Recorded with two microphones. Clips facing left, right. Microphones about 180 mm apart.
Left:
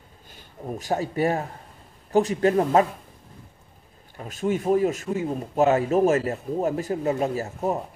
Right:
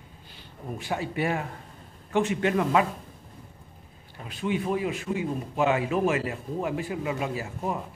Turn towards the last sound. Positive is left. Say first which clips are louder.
# left 5 dB
turn(degrees=40)  # may be behind; listen again after turning